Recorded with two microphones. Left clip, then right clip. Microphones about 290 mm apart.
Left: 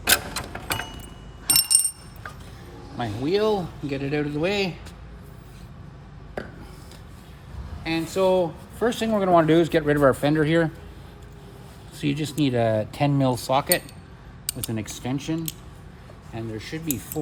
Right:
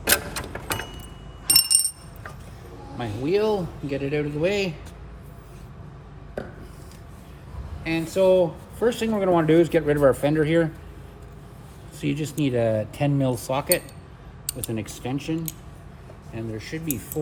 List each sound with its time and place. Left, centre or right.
0.1 s a sound: centre
3.0 s speech: left
7.9 s speech: left
11.9 s speech: left